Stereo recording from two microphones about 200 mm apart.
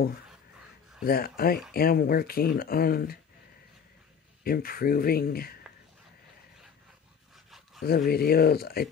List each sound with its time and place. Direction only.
1.0 s speech: 50° left (ahead or behind)
4.5 s speech: 50° left (ahead or behind)
7.8 s speech: 50° left (ahead or behind)